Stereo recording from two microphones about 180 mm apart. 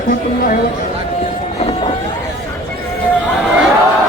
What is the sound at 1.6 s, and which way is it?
Vehicle, 35° left (ahead or behind).